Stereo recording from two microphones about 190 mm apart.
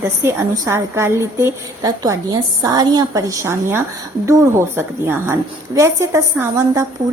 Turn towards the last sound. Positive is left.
turn(degrees=-15)  # may be behind; listen again after turning